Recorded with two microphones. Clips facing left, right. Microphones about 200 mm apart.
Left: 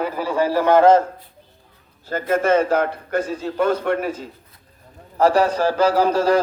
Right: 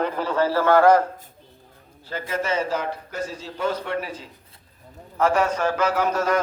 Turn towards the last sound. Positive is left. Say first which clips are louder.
# left 5 dB
turn(degrees=30)  # may be behind; listen again after turning